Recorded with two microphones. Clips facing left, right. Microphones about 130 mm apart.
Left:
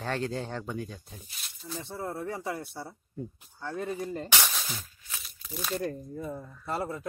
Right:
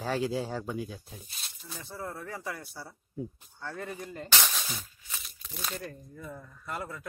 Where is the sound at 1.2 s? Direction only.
35° right (ahead or behind).